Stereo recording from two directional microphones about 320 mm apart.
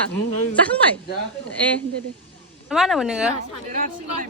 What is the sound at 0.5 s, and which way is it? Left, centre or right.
Speech, centre.